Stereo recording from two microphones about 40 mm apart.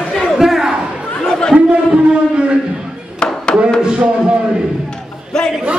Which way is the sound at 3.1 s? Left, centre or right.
Centre.